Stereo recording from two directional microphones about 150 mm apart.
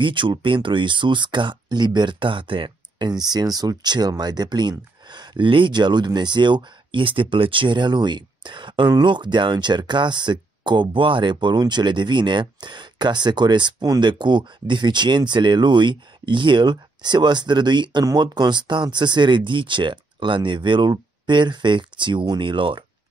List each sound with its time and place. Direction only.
0.0 s speech: 35° right (ahead or behind)